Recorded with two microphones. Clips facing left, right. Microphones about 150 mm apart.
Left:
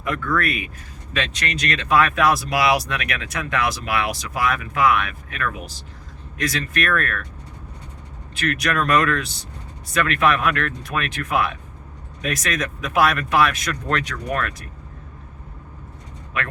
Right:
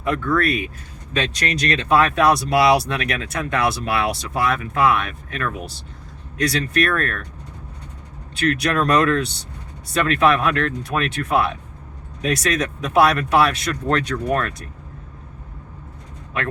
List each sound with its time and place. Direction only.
0.0 s speech: 25° right (ahead or behind)
8.4 s speech: 30° right (ahead or behind)